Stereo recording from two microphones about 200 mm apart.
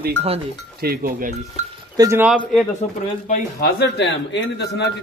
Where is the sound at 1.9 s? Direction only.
15° right (ahead or behind).